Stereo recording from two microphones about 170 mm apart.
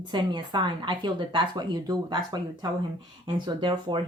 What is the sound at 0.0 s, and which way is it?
Speech, 25° right (ahead or behind).